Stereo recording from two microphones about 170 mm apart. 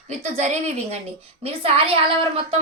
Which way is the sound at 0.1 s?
40° right (ahead or behind).